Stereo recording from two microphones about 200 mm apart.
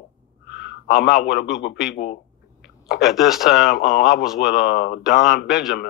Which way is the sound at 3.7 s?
50° left (ahead or behind).